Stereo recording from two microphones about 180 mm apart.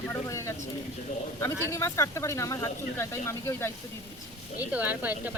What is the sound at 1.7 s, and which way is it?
Speech, 15° left (ahead or behind).